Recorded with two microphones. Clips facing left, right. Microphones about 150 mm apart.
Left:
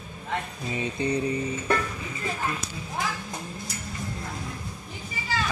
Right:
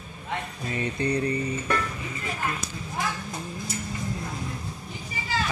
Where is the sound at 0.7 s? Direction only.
20° left (ahead or behind).